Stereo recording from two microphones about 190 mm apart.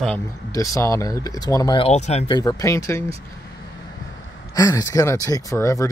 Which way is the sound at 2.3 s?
20° left (ahead or behind).